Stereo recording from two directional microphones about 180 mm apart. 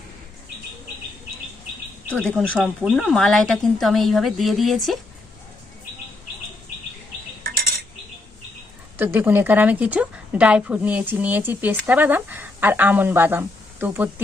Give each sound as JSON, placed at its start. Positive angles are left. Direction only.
{"t": 2.0, "sound": "speech", "side_deg": 5}
{"t": 7.4, "sound": "cutlery", "side_deg": -55}
{"t": 9.0, "sound": "a woman's voice", "side_deg": -10}